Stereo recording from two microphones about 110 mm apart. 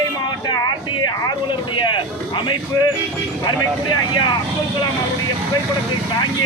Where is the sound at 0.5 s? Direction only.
40° left (ahead or behind).